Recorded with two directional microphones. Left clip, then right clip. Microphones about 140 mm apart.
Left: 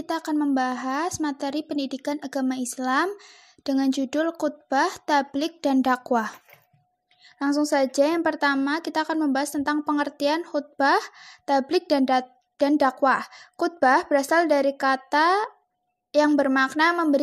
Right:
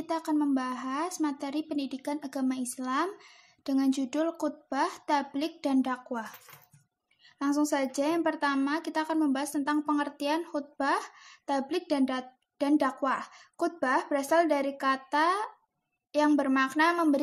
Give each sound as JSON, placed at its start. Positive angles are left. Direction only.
{"t": 0.0, "sound": "a woman's voice", "side_deg": 45}
{"t": 7.3, "sound": "a woman's voice", "side_deg": 40}